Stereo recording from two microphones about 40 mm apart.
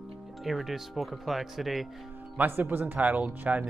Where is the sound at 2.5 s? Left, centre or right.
Right.